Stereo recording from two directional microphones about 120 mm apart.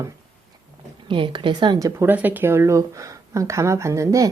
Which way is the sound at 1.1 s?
45° right (ahead or behind).